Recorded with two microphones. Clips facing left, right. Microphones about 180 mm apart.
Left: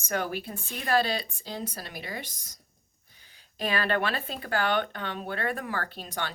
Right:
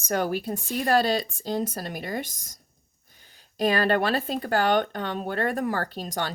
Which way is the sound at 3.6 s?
40° right (ahead or behind).